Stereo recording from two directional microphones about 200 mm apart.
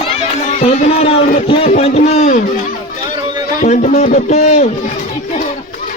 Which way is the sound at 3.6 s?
40° left (ahead or behind).